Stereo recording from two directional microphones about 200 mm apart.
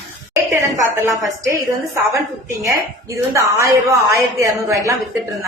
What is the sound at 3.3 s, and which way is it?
Speech, 15° right (ahead or behind).